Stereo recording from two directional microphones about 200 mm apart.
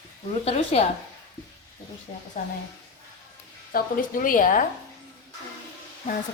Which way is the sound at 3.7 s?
45° left (ahead or behind).